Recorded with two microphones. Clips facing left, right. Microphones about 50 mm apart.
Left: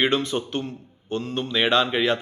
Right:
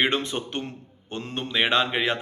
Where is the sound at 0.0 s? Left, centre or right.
Right.